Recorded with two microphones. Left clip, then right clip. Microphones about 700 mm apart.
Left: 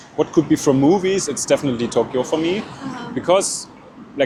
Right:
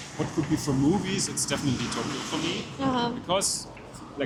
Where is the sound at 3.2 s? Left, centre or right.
Left.